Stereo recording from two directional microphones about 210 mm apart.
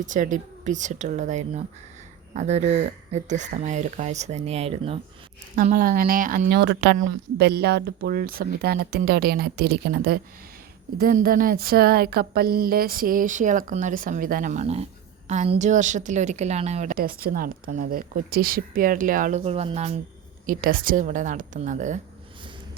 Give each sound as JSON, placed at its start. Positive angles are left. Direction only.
{"t": 0.0, "sound": "a woman's voice", "side_deg": -35}
{"t": 5.5, "sound": "a woman's voice", "side_deg": -40}
{"t": 20.5, "sound": "a woman's voice", "side_deg": -45}